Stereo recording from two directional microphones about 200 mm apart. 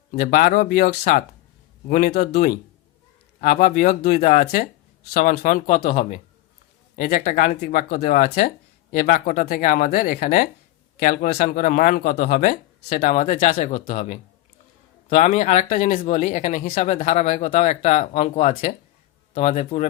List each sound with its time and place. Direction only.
0.1 s speech: 45° left (ahead or behind)